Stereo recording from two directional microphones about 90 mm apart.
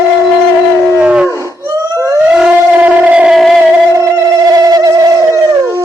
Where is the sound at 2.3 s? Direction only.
10° right (ahead or behind).